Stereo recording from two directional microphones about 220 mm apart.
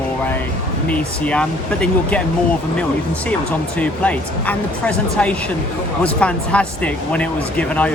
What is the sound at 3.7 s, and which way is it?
Speech, 5° left (ahead or behind).